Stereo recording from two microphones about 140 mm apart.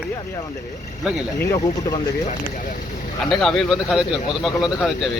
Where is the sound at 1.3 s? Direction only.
20° left (ahead or behind).